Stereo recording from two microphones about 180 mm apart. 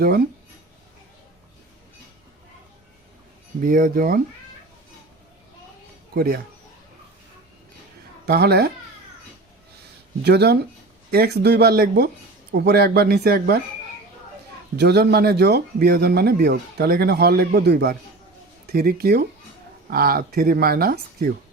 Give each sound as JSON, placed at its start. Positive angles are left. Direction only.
{"t": 3.6, "sound": "speech", "side_deg": -50}
{"t": 6.1, "sound": "speech", "side_deg": -55}
{"t": 8.3, "sound": "speech", "side_deg": -60}
{"t": 10.2, "sound": "speech", "side_deg": -65}
{"t": 14.8, "sound": "speech", "side_deg": -65}